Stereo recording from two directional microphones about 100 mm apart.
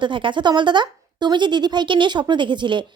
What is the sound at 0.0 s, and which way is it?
A woman's voice, 55° right (ahead or behind).